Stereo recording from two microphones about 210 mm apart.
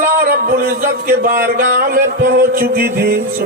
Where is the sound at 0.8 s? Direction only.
45° right (ahead or behind).